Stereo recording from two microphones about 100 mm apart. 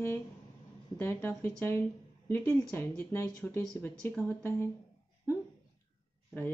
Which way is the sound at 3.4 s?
5° left (ahead or behind).